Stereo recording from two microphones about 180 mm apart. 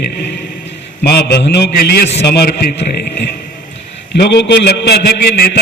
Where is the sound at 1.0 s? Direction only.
65° left (ahead or behind).